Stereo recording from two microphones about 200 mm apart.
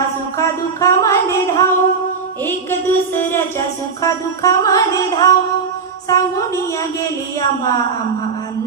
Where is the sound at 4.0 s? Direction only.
15° left (ahead or behind).